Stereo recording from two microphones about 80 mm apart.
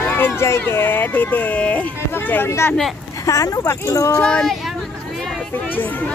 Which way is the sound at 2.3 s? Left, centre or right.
Left.